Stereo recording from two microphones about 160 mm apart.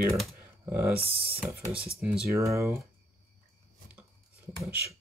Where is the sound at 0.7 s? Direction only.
15° right (ahead or behind).